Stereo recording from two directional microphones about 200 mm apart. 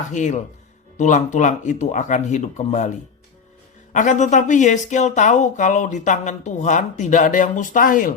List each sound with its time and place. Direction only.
0.1 s speech: 35° left (ahead or behind)